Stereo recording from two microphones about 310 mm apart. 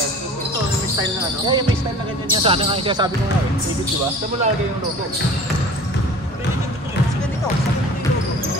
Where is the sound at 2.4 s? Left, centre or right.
Centre.